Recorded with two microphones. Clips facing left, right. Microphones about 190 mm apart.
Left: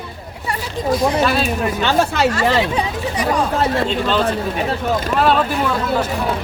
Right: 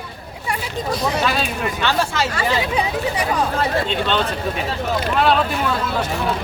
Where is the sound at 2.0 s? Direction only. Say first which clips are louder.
Left 5 dB; 65° left (ahead or behind).